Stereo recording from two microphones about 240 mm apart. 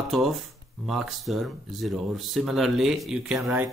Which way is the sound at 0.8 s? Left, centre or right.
Centre.